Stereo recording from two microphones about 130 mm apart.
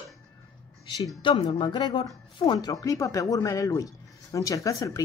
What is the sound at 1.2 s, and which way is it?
A woman's voice, 35° left (ahead or behind).